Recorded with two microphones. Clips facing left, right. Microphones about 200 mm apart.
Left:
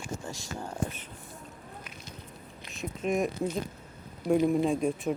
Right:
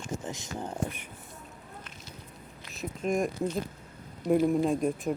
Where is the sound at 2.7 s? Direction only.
Centre (ahead or behind).